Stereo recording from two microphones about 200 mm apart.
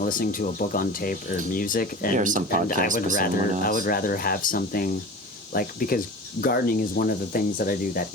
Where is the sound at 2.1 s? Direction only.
40° right (ahead or behind).